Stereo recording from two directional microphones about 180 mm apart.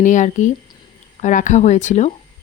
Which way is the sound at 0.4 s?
45° left (ahead or behind).